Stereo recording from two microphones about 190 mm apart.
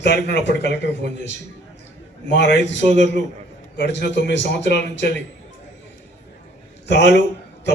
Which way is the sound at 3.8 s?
65° left (ahead or behind).